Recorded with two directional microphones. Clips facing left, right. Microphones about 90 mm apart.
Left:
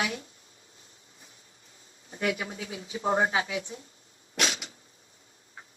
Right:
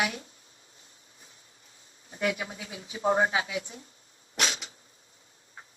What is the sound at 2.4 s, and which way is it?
Speech, 35° left (ahead or behind).